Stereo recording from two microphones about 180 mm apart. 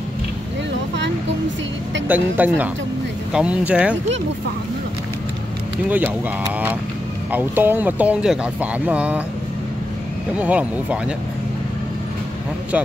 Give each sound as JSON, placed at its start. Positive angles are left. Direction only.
{"t": 2.0, "sound": "speech", "side_deg": -10}
{"t": 5.9, "sound": "speech", "side_deg": -10}
{"t": 7.3, "sound": "speech", "side_deg": -10}
{"t": 10.3, "sound": "speech", "side_deg": -10}